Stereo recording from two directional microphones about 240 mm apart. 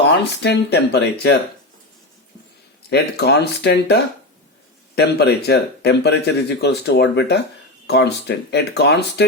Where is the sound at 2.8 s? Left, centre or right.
Left.